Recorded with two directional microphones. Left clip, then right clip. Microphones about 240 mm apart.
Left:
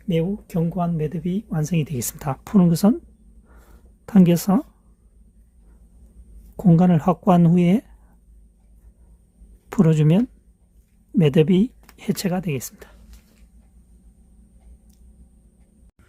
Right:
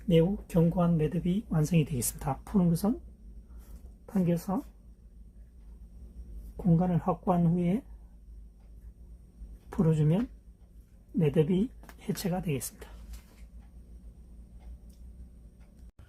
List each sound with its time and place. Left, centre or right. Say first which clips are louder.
0.1 s speech: left 2 dB; left
4.0 s speech: left 13 dB; left
6.7 s speech: left 10 dB; left
9.6 s speech: left 10 dB; left
11.2 s speech: left 10 dB; left